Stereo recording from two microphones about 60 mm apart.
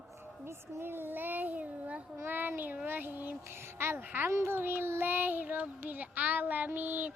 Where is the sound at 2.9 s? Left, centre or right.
Right.